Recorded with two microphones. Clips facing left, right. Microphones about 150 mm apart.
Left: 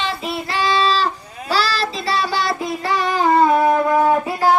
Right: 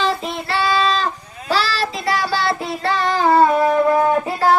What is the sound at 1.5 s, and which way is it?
Child singing, 40° left (ahead or behind).